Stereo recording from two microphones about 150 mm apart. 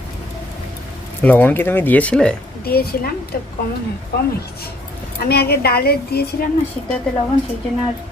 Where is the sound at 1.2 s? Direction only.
10° left (ahead or behind).